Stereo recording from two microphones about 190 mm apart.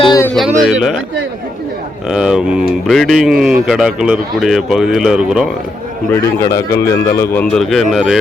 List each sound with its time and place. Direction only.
0.0 s a sound: 20° left (ahead or behind)
0.3 s speech: centre (ahead or behind)
2.0 s speech: 5° right (ahead or behind)
6.4 s speech: 15° left (ahead or behind)
7.5 s speech: centre (ahead or behind)